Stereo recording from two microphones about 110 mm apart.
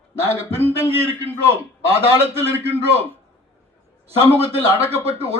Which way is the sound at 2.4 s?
20° right (ahead or behind).